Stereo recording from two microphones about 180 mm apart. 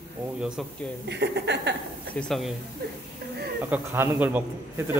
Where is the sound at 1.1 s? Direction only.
70° right (ahead or behind).